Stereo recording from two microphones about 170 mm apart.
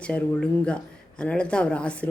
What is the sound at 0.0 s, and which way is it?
Speech, 5° left (ahead or behind).